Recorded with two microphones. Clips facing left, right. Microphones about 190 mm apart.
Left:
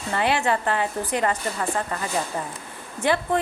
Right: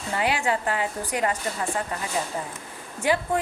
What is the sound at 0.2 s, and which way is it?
A woman's voice, 10° right (ahead or behind).